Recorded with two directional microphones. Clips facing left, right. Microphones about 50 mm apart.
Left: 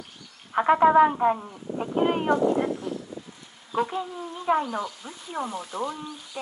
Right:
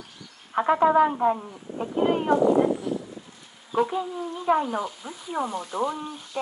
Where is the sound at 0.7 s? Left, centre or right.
Left.